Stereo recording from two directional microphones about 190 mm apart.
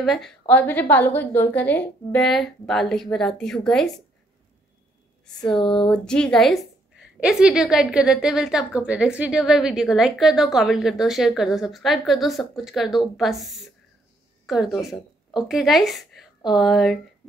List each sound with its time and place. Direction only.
0.0 s a woman's voice: centre (ahead or behind)
5.5 s speech: 25° left (ahead or behind)
5.9 s a woman's voice: 5° left (ahead or behind)